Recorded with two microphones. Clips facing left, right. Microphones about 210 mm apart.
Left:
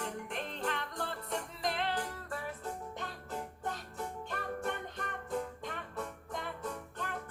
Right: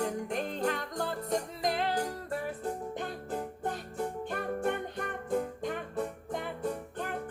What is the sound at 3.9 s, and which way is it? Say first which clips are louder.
Music: right 6 dB; 45° right (ahead or behind).